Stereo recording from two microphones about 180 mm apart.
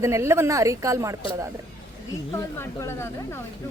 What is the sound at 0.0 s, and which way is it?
A woman's voice, 15° right (ahead or behind).